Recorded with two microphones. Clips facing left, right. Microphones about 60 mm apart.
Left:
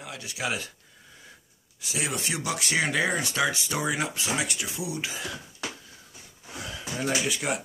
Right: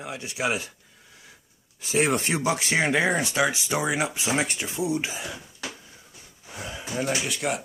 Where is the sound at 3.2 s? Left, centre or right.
Centre.